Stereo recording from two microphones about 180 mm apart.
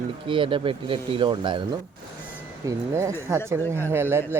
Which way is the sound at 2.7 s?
15° right (ahead or behind).